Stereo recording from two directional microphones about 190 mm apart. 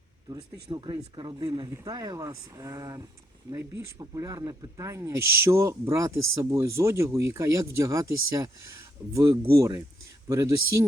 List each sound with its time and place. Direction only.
0.3 s speech: 20° right (ahead or behind)